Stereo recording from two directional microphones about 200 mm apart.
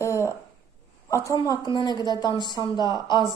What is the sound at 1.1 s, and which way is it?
Speech, 15° left (ahead or behind).